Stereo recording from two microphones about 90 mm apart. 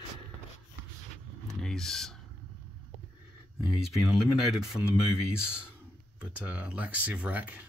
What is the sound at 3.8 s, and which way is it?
Speech, 5° right (ahead or behind).